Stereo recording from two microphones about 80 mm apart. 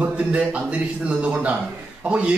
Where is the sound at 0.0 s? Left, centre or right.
Centre.